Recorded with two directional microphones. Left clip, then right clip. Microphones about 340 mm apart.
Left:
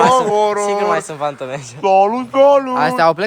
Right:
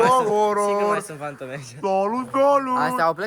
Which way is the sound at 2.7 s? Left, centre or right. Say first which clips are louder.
Left 7 dB; left.